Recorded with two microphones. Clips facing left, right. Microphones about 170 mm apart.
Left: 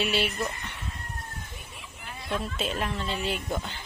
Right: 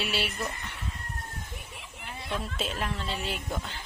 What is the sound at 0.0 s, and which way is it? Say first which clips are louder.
Speech: left 4 dB; 5° right (ahead or behind).